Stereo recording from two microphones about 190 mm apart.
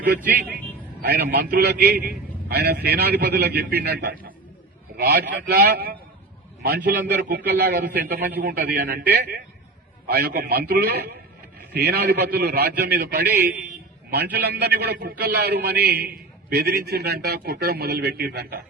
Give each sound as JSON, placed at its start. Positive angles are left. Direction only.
{"t": 1.0, "sound": "a man's voice", "side_deg": -55}